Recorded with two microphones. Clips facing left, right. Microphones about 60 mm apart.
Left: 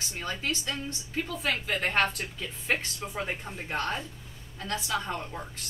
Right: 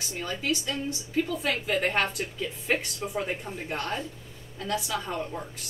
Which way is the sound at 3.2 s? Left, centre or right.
Centre.